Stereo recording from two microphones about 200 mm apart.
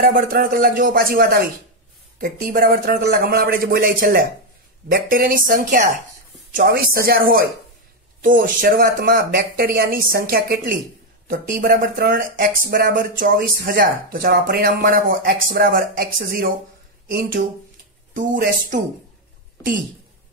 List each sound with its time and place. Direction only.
0.1 s speech: 45° right (ahead or behind)
17.1 s speech: 45° right (ahead or behind)